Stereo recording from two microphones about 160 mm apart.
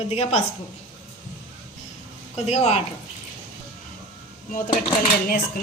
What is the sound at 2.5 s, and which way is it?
Speech, 40° left (ahead or behind).